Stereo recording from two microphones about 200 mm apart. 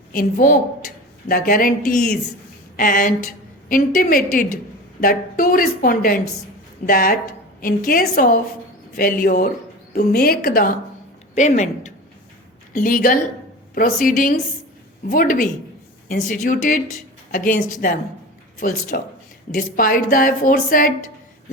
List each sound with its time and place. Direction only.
0.1 s speech: 45° left (ahead or behind)